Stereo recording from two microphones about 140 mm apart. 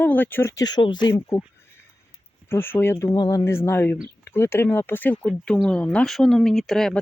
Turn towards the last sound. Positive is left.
turn(degrees=5)  # may be behind; listen again after turning